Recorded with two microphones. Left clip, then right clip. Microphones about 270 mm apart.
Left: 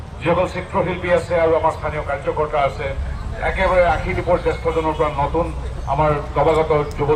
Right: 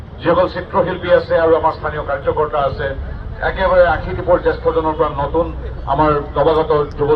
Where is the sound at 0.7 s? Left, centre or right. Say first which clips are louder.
Right 5 dB; left.